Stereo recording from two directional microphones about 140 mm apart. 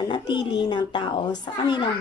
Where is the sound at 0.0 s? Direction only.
30° left (ahead or behind).